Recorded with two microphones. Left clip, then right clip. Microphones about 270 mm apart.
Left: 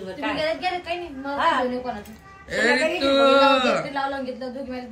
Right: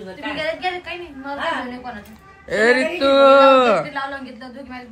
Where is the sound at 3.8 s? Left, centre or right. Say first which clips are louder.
Even; left.